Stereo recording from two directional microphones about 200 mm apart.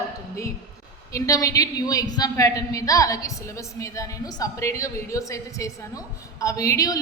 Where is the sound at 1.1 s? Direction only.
15° left (ahead or behind).